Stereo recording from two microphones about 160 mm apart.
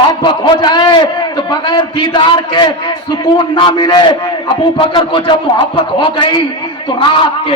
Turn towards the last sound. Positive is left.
turn(degrees=30)  # may be behind; listen again after turning